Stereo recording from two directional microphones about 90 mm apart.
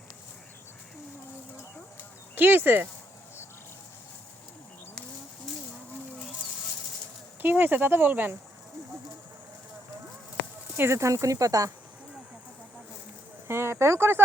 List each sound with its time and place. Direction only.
2.3 s speech: 20° right (ahead or behind)
7.4 s speech: 20° right (ahead or behind)
10.8 s speech: 30° right (ahead or behind)
13.5 s speech: 30° right (ahead or behind)